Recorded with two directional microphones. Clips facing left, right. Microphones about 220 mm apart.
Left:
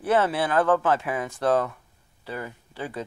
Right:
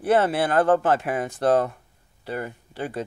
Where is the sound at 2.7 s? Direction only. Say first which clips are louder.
Right 3 dB; 45° right (ahead or behind).